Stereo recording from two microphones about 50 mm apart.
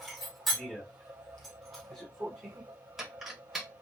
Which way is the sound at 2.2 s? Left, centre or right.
Right.